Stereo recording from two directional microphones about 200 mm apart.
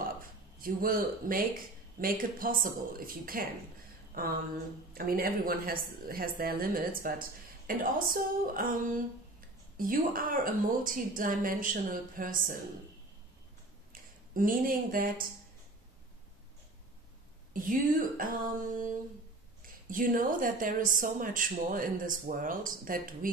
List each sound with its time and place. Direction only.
0.2 s a woman's voice: 45° right (ahead or behind)
14.3 s a woman's voice: 45° right (ahead or behind)
17.5 s a woman's voice: 45° right (ahead or behind)